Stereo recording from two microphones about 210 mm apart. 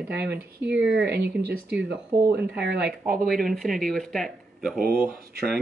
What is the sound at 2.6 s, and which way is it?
Speech, 50° right (ahead or behind).